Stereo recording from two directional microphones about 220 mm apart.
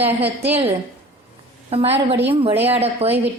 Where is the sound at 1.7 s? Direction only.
25° right (ahead or behind).